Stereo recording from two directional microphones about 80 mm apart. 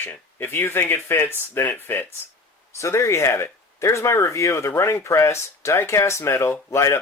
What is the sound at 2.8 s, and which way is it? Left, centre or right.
Speech, left.